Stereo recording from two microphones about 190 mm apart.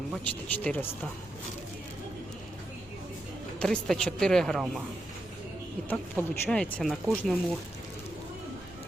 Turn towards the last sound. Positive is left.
turn(degrees=0)  # may be behind; listen again after turning